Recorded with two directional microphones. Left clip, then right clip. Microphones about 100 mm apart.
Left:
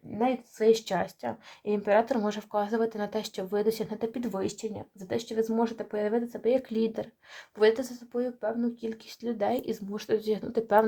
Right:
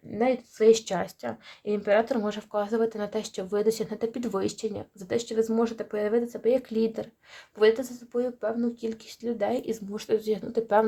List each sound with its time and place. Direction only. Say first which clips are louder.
0.3 s speech: right 4 dB; 40° right (ahead or behind)
0.9 s speech: even; 10° right (ahead or behind); by 4.4 s 25° right (ahead or behind)
4.4 s speech: right 5 dB; 50° right (ahead or behind)
5.0 s speech: right 3 dB; 30° right (ahead or behind); by 7.9 s centre (ahead or behind)
8.2 s speech: right 2 dB; 35° right (ahead or behind)
9.2 s speech: right 1 dB; centre (ahead or behind)